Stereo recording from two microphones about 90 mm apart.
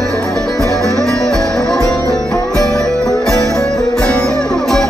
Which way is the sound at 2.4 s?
40° right (ahead or behind).